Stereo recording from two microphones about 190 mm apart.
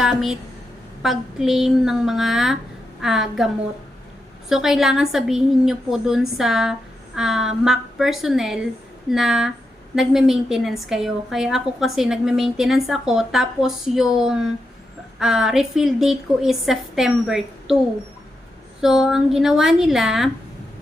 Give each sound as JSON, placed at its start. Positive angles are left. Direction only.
{"t": 0.0, "sound": "a woman's voice", "side_deg": 0}
{"t": 18.8, "sound": "a woman's voice", "side_deg": 0}